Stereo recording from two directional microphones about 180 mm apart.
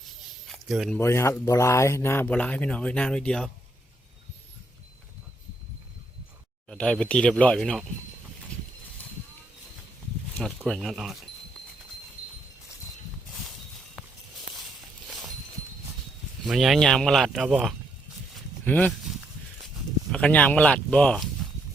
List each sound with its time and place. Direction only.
0.4 s a sound: centre (ahead or behind)
0.9 s speech: 15° left (ahead or behind)
6.7 s speech: 5° left (ahead or behind)
10.7 s speech: centre (ahead or behind)
14.5 s walk: centre (ahead or behind)
16.4 s speech: centre (ahead or behind)
18.6 s speech: 10° left (ahead or behind)
20.1 s speech: 5° left (ahead or behind)